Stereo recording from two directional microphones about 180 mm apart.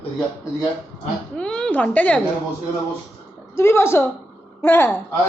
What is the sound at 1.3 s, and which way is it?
Speech, 5° left (ahead or behind).